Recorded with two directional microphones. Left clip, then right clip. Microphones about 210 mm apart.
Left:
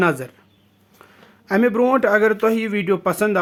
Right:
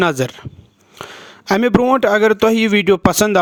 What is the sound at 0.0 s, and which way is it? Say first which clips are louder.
Speech: right 3 dB; 40° right (ahead or behind).